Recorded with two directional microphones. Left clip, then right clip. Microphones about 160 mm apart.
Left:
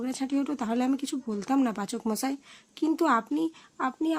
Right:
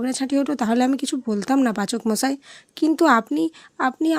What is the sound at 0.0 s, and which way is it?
Speech, 35° right (ahead or behind).